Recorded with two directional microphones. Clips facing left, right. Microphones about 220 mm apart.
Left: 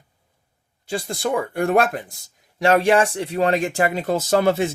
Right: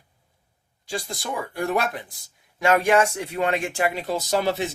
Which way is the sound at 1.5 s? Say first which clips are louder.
Left 4 dB; 50° left (ahead or behind).